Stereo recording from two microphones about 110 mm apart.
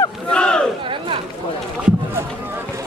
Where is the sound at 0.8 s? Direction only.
50° right (ahead or behind).